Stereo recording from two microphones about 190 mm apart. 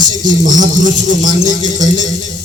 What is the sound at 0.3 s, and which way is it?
A man's voice, 40° right (ahead or behind).